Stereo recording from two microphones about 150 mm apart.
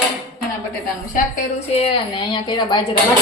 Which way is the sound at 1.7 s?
35° left (ahead or behind).